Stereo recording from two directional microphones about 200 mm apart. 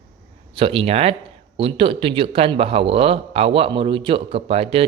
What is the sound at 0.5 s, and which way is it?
A man's voice, 30° right (ahead or behind).